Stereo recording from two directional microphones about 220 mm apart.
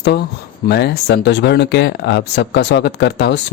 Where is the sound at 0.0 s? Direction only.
50° left (ahead or behind).